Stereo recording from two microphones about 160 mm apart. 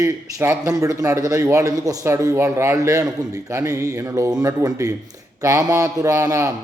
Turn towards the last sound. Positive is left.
turn(degrees=-20)  # may be behind; listen again after turning